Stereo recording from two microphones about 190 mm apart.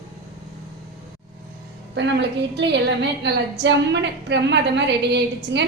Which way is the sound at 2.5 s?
65° right (ahead or behind).